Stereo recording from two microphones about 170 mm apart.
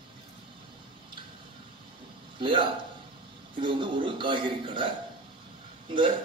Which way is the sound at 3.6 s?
30° right (ahead or behind).